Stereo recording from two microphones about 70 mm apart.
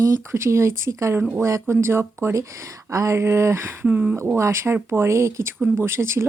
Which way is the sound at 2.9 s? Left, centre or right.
Right.